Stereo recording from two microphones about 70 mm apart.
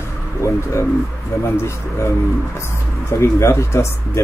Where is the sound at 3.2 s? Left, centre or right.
Left.